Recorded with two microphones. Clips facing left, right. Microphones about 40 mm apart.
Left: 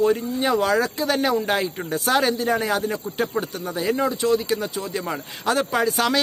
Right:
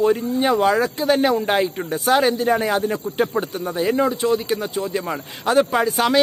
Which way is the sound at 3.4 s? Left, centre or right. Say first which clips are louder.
Right 3 dB; right.